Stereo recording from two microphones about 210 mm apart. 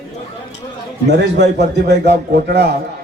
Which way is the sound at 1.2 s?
55° right (ahead or behind).